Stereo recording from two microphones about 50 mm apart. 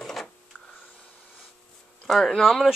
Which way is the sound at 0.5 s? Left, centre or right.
Left.